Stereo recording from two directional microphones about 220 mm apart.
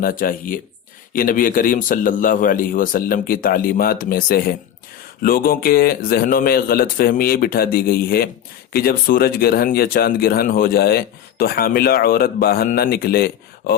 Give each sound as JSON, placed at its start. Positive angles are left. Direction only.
{"t": 0.0, "sound": "a man's voice", "side_deg": 40}